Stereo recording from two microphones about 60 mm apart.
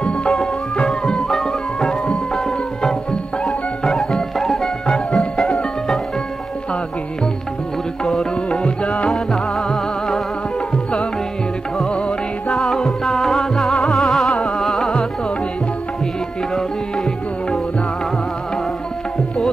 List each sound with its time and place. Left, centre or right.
0.0 s music: centre
4.8 s music: centre
8.0 s music: centre
9.1 s music: centre
12.4 s music: centre
16.5 s tabla: centre